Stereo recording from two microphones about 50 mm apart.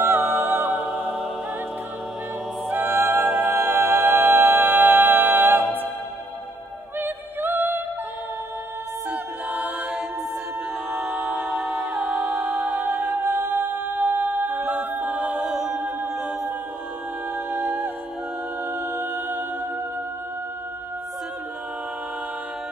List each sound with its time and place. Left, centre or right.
0.0 s music: right
2.7 s music: right
3.3 s music: right
7.0 s music: right
9.5 s music: centre
11.0 s a capella: right
11.9 s music: right
13.2 s music: right
14.6 s a capella: right
15.4 s a capella: centre
18.7 s music: right